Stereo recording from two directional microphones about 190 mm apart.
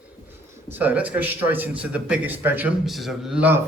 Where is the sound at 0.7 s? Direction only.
10° right (ahead or behind).